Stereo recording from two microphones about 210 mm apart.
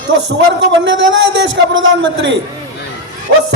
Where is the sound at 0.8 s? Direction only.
60° right (ahead or behind).